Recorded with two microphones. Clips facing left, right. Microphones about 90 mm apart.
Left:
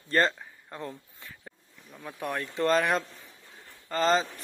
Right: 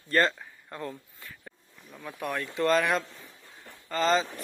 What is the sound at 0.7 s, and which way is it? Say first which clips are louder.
Speech: right 1 dB; 15° left (ahead or behind).